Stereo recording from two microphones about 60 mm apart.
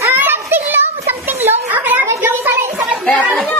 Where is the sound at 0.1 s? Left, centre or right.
Right.